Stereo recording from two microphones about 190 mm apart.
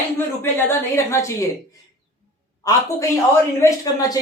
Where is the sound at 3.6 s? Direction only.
20° left (ahead or behind).